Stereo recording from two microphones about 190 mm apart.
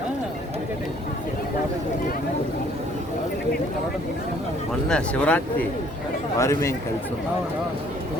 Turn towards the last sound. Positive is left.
turn(degrees=15)  # may be behind; listen again after turning